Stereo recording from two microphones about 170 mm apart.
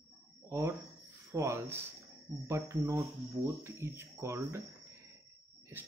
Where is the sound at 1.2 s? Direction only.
15° right (ahead or behind).